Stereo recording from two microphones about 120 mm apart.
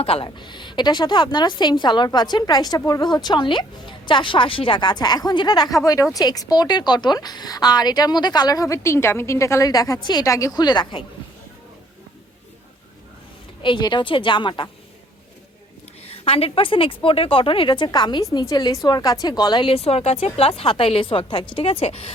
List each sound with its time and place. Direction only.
0.0 s a woman's voice: 50° left (ahead or behind)
0.3 s a woman's voice: 40° left (ahead or behind)
13.6 s a woman's voice: 40° left (ahead or behind)
16.0 s a woman's voice: 50° left (ahead or behind)